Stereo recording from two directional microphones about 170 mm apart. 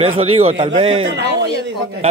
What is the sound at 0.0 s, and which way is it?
A man's voice, 35° right (ahead or behind).